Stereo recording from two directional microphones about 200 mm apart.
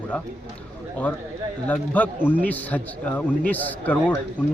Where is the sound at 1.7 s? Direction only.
5° left (ahead or behind).